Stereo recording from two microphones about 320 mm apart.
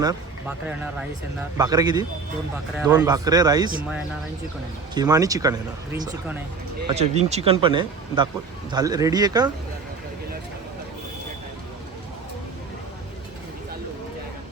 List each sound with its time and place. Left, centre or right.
0.0 s speech: centre
4.9 s speech: centre
6.9 s speech: centre